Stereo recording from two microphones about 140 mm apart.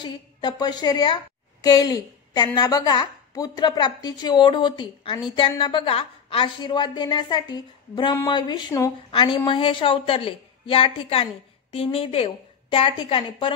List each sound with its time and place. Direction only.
0.0 s a woman's voice: 30° left (ahead or behind)